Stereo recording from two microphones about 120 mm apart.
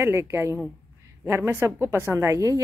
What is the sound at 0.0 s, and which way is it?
Speech, 20° right (ahead or behind).